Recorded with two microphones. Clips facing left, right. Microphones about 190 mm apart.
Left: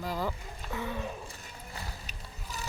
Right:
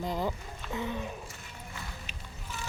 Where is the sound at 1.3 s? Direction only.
35° left (ahead or behind).